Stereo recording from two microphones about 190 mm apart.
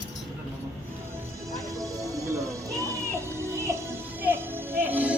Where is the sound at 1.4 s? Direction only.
15° right (ahead or behind).